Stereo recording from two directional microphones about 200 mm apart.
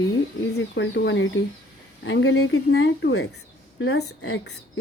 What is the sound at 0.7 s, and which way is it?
Speech, 65° left (ahead or behind).